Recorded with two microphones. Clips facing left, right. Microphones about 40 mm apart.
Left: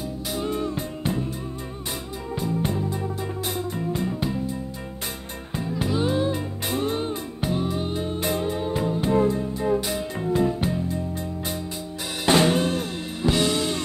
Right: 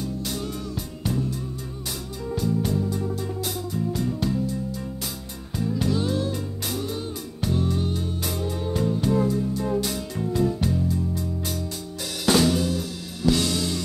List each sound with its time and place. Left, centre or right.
0.0 s music: centre
0.5 s music: left
2.3 s music: left
7.3 s music: left
12.3 s music: left
13.3 s music: left